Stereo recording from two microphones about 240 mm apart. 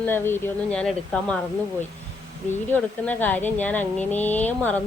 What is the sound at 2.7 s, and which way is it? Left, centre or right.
Speech, centre.